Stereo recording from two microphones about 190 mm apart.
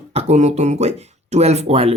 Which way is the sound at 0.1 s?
35° right (ahead or behind).